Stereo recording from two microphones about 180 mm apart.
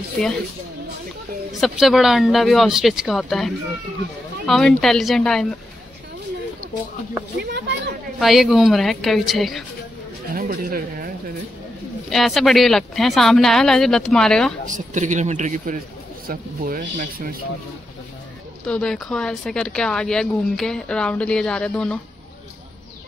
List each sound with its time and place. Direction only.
1.6 s speech: centre (ahead or behind)
7.5 s speech: 75° right (ahead or behind)
8.2 s speech: centre (ahead or behind)
10.3 s speech: 55° right (ahead or behind)
12.1 s speech: centre (ahead or behind)
14.7 s a man's voice: 45° right (ahead or behind)
18.7 s speech: 5° left (ahead or behind)